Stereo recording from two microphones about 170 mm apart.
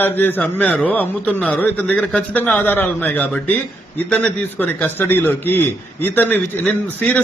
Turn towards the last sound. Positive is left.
turn(degrees=10)  # may be behind; listen again after turning